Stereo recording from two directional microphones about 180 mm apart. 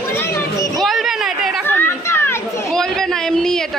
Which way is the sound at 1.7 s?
10° left (ahead or behind).